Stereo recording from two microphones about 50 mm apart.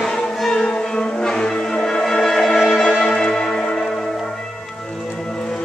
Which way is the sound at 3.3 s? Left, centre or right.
Centre.